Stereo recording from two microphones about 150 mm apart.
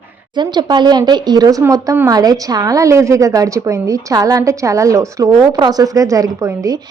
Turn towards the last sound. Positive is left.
turn(degrees=-20)  # may be behind; listen again after turning